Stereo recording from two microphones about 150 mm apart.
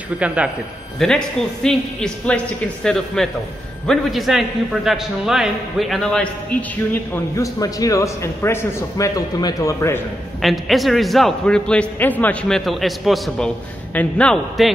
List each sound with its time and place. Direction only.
0.2 s a man's voice: 10° right (ahead or behind)
0.9 s a man's voice: 5° left (ahead or behind)
6.9 s a man's voice: 20° left (ahead or behind)
10.4 s a man's voice: centre (ahead or behind)